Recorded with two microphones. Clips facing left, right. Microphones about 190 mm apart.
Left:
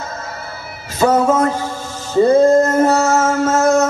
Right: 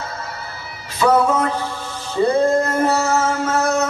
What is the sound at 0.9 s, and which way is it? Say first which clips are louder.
Speech: left 2 dB; 45° left (ahead or behind).